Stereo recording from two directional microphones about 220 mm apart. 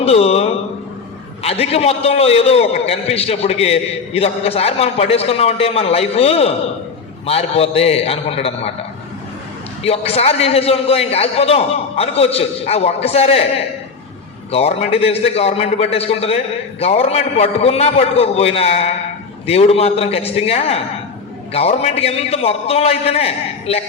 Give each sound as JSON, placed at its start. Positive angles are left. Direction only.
{"t": 0.0, "sound": "a sound", "side_deg": 25}
{"t": 1.4, "sound": "a man's voice", "side_deg": 25}
{"t": 9.8, "sound": "a man's voice", "side_deg": 25}
{"t": 14.5, "sound": "a man's voice", "side_deg": 25}